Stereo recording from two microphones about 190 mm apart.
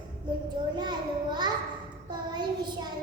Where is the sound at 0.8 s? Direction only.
20° right (ahead or behind).